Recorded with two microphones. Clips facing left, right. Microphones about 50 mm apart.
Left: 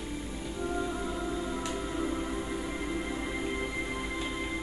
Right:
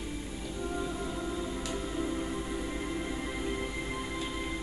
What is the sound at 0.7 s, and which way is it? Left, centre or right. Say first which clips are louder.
Music: left 2 dB; centre.